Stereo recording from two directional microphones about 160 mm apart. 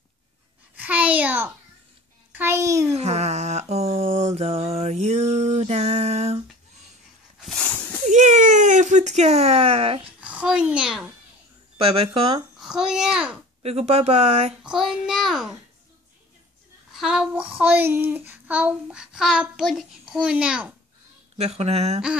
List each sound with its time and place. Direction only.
0.7 s a sound: 10° right (ahead or behind)
2.9 s a sound: 40° right (ahead or behind)
8.1 s a sound: 50° right (ahead or behind)
10.2 s a child's voice: 5° right (ahead or behind)
11.8 s speech: 35° right (ahead or behind)
12.5 s a child's voice: 5° right (ahead or behind)
13.6 s speech: 40° right (ahead or behind)
14.6 s a child's voice: 5° right (ahead or behind)
16.9 s child singing: 5° right (ahead or behind)
21.4 s speech: 40° right (ahead or behind)